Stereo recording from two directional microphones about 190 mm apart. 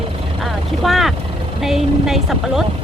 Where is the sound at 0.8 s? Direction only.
Centre (ahead or behind).